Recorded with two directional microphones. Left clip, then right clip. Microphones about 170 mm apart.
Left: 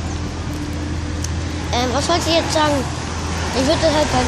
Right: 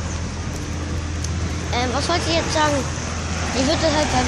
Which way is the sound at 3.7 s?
5° left (ahead or behind).